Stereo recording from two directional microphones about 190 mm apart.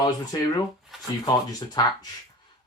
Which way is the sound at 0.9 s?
Centre (ahead or behind).